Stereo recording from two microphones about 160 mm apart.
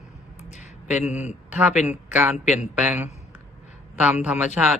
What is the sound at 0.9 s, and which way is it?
Speech, 10° right (ahead or behind).